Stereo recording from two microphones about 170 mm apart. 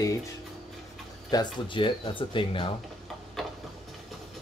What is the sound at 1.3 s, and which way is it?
Speech, 25° left (ahead or behind).